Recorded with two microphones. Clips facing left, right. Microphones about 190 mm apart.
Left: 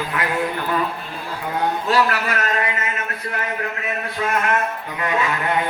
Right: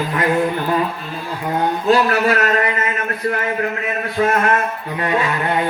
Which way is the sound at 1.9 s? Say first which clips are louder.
Right 7 dB; 30° right (ahead or behind).